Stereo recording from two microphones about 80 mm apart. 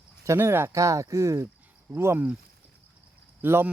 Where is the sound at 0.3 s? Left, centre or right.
Right.